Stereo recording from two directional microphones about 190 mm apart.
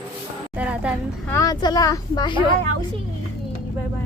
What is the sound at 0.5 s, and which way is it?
Speech, 5° right (ahead or behind).